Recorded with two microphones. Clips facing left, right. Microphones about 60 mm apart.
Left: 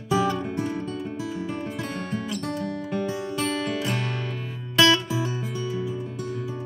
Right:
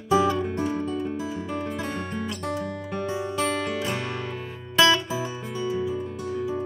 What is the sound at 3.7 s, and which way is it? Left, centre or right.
Music, centre.